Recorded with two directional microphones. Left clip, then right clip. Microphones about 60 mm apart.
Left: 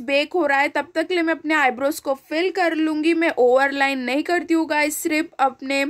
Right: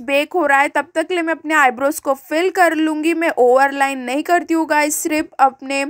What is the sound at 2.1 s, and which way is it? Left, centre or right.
Speech, right.